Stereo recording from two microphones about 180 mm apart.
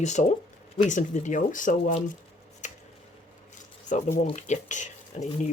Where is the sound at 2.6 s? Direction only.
40° left (ahead or behind).